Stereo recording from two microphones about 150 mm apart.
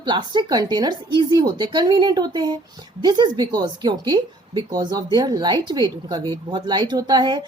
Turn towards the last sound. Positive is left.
turn(degrees=-30)  # may be behind; listen again after turning